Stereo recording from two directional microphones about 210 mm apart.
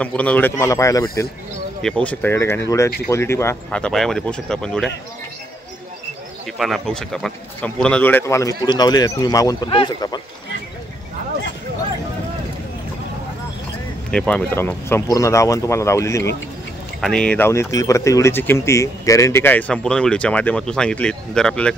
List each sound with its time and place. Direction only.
0.0 s speech: 5° left (ahead or behind)
1.8 s speech: 5° left (ahead or behind)
6.6 s speech: centre (ahead or behind); by 10.2 s 20° left (ahead or behind)
14.1 s speech: 5° left (ahead or behind)